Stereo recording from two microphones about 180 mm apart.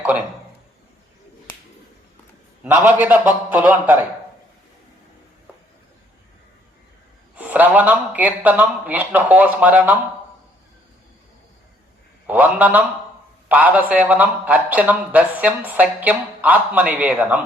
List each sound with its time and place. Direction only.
2.6 s a man's voice: 10° right (ahead or behind)
7.3 s a man's voice: 10° right (ahead or behind)
12.3 s a man's voice: 10° right (ahead or behind)